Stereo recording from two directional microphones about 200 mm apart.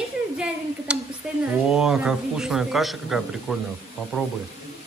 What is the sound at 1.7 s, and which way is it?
A man's voice, centre (ahead or behind).